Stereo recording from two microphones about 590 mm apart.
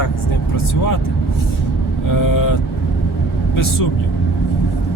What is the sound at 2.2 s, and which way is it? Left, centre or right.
Speech, left.